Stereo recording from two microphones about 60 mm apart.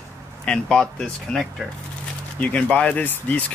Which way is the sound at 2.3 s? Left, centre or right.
Left.